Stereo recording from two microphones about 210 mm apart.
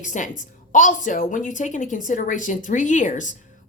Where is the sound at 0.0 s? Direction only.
35° left (ahead or behind).